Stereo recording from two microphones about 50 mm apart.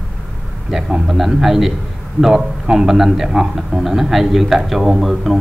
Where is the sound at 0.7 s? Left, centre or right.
Centre.